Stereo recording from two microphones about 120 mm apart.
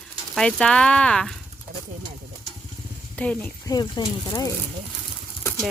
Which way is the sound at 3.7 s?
30° left (ahead or behind).